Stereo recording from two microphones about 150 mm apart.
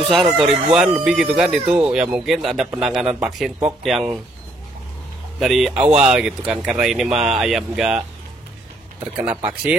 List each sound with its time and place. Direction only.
0.1 s speech: centre (ahead or behind)
5.4 s speech: centre (ahead or behind)
9.0 s speech: 10° right (ahead or behind)